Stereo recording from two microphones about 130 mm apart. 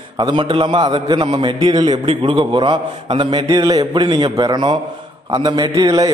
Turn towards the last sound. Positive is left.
turn(degrees=-30)  # may be behind; listen again after turning